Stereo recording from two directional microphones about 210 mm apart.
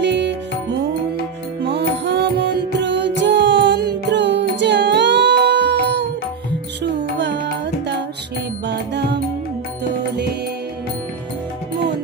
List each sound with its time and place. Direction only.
0.0 s music: 55° right (ahead or behind)
1.6 s music: 55° right (ahead or behind)